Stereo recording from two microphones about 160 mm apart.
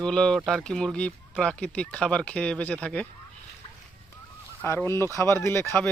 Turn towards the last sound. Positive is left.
turn(degrees=15)  # may be behind; listen again after turning